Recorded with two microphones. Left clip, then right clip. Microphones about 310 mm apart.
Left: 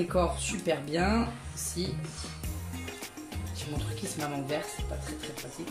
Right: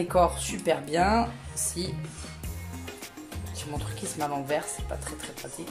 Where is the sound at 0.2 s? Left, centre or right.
Right.